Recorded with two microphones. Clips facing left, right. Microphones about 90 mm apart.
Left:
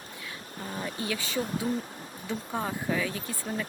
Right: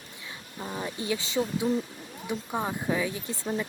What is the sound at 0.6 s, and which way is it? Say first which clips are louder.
Speech: right 1 dB; 20° right (ahead or behind).